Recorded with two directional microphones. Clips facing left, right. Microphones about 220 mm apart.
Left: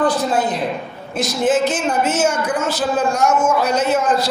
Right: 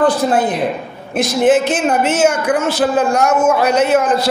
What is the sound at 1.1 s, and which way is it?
A man's voice, 60° right (ahead or behind).